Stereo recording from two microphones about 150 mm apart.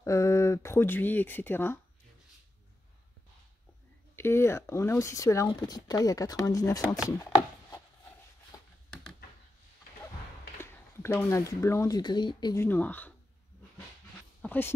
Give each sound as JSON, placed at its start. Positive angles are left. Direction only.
{"t": 0.0, "sound": "speech", "side_deg": 20}
{"t": 4.2, "sound": "speech", "side_deg": 15}
{"t": 8.5, "sound": "a sound", "side_deg": 25}
{"t": 10.6, "sound": "speech", "side_deg": 15}
{"t": 12.5, "sound": "speech", "side_deg": 10}
{"t": 14.4, "sound": "a sound", "side_deg": 10}